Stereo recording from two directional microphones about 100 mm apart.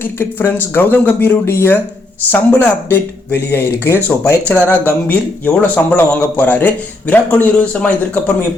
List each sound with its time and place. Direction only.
0.0 s a man's voice: 20° left (ahead or behind)